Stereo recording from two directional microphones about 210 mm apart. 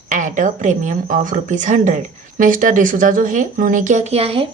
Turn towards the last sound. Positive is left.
turn(degrees=-25)  # may be behind; listen again after turning